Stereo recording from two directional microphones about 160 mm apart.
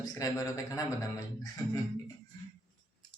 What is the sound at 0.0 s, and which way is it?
Speech, 20° left (ahead or behind).